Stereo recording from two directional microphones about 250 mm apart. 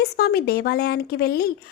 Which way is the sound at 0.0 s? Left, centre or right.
Left.